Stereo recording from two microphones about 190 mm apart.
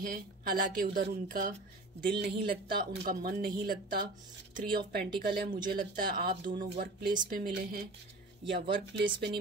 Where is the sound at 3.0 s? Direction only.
50° right (ahead or behind).